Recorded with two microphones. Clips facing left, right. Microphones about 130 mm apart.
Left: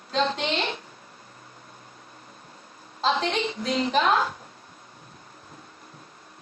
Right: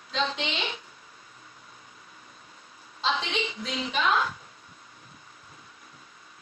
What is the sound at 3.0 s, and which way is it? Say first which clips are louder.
Speech: left 5 dB; 50° left (ahead or behind).